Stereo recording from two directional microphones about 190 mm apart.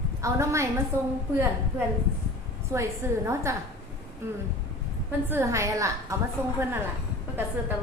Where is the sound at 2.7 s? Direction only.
15° right (ahead or behind).